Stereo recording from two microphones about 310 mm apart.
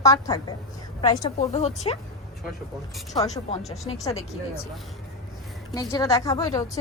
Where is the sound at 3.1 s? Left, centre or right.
Left.